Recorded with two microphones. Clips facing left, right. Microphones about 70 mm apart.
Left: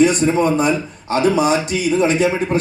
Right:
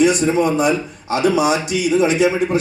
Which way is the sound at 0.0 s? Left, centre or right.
Left.